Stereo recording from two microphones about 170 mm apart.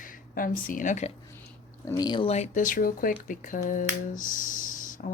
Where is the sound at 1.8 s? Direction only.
20° left (ahead or behind).